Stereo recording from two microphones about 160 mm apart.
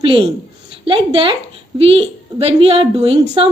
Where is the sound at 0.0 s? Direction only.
35° right (ahead or behind).